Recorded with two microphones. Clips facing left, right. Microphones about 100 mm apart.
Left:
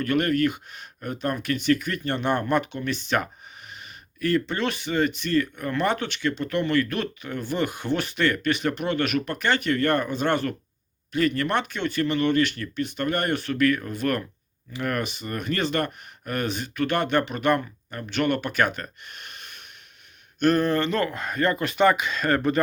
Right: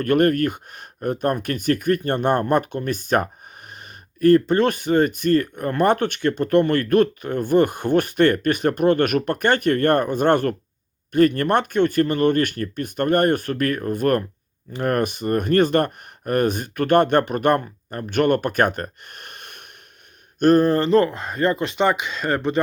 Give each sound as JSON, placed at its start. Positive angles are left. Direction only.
{"t": 0.0, "sound": "speech", "side_deg": -50}
{"t": 20.4, "sound": "speech", "side_deg": -40}